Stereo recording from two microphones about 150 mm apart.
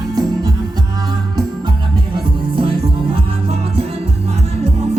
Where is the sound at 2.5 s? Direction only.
35° right (ahead or behind).